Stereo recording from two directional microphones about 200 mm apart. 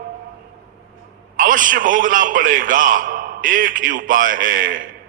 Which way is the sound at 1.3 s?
40° right (ahead or behind).